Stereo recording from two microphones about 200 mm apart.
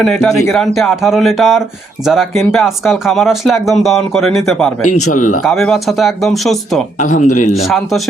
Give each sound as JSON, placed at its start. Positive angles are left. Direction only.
{"t": 0.0, "sound": "speech", "side_deg": 0}
{"t": 7.0, "sound": "a man's voice", "side_deg": 40}
{"t": 7.5, "sound": "speech", "side_deg": 0}